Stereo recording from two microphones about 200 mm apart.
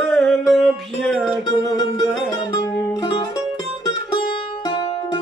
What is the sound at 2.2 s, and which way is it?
Music, 20° left (ahead or behind).